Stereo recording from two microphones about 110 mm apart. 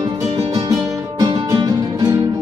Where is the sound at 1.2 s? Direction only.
40° right (ahead or behind).